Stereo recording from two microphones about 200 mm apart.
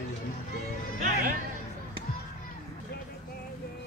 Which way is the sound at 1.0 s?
45° right (ahead or behind).